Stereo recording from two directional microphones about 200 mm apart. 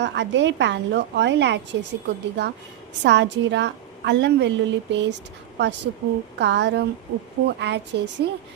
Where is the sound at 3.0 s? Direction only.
60° right (ahead or behind).